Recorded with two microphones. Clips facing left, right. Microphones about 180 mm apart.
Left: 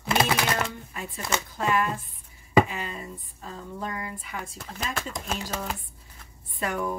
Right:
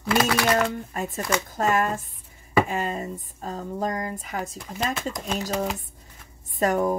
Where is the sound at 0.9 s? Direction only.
45° right (ahead or behind).